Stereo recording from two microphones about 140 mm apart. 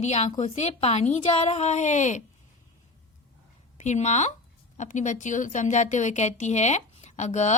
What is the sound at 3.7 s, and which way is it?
A woman's voice, 55° left (ahead or behind).